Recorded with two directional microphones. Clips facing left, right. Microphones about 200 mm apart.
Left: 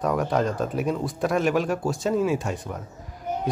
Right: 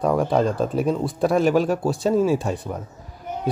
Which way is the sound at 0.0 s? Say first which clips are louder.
Right 4 dB; 30° right (ahead or behind).